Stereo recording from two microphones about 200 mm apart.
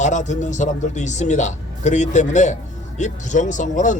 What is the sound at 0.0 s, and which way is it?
Speech, 35° left (ahead or behind).